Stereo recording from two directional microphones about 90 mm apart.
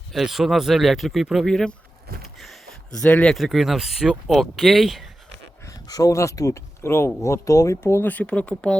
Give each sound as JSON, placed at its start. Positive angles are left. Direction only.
{"t": 0.1, "sound": "speech", "side_deg": 0}
{"t": 2.2, "sound": "a sound", "side_deg": 0}
{"t": 3.0, "sound": "speech", "side_deg": 10}
{"t": 3.3, "sound": "speech", "side_deg": 0}
{"t": 5.6, "sound": "speech", "side_deg": 40}
{"t": 8.1, "sound": "speech", "side_deg": 15}